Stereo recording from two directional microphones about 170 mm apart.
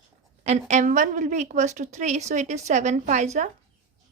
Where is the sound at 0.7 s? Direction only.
45° right (ahead or behind).